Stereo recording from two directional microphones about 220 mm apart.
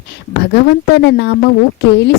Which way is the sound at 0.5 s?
45° left (ahead or behind).